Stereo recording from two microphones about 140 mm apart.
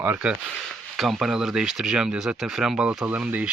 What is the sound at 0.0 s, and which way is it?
Speech, 10° right (ahead or behind).